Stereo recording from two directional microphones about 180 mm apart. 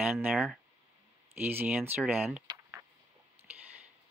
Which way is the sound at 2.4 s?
20° right (ahead or behind).